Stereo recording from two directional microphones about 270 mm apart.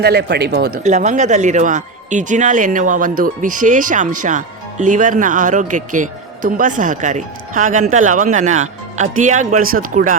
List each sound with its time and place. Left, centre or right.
0.0 s speech: right